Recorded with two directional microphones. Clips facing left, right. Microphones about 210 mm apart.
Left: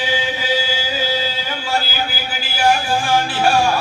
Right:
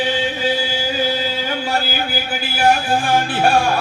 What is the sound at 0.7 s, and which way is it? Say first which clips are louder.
Music: right 2 dB; 55° right (ahead or behind).